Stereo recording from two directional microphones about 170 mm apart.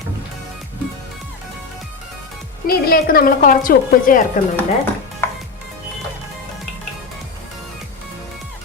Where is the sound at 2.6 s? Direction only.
65° left (ahead or behind).